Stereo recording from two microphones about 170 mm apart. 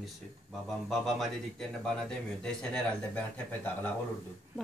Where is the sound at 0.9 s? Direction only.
Centre (ahead or behind).